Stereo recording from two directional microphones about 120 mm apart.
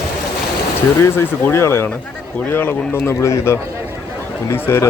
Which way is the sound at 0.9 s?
20° left (ahead or behind).